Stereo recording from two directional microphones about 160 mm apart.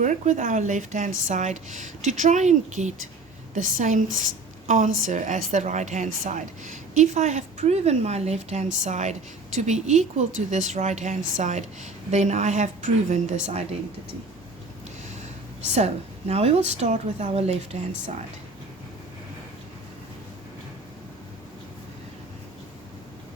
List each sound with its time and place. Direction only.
0.0 s a woman's voice: 50° right (ahead or behind)
15.7 s a woman's voice: 45° right (ahead or behind)